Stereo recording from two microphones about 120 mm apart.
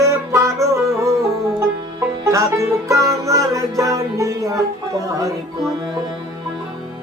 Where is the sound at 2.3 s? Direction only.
25° right (ahead or behind).